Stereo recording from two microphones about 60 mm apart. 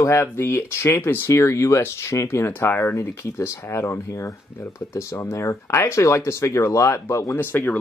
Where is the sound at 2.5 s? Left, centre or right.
Left.